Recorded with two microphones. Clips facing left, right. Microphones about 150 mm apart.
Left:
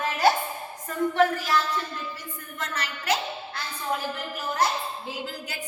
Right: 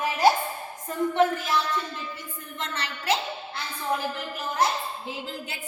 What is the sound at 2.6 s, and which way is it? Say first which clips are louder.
Speech: even; 25° right (ahead or behind).